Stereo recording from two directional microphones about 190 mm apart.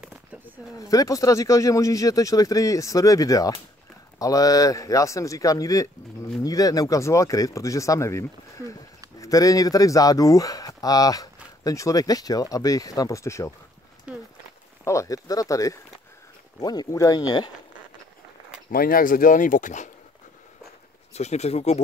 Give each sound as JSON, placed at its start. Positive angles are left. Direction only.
{"t": 0.7, "sound": "speech", "side_deg": 20}
{"t": 14.1, "sound": "a sound", "side_deg": -5}
{"t": 14.9, "sound": "speech", "side_deg": 15}
{"t": 18.7, "sound": "speech", "side_deg": 50}
{"t": 21.1, "sound": "speech", "side_deg": 35}